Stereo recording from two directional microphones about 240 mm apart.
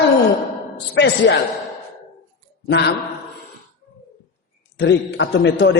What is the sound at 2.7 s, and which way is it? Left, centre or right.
Speech, left.